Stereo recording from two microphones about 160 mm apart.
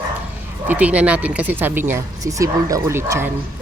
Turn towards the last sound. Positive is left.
turn(degrees=-15)  # may be behind; listen again after turning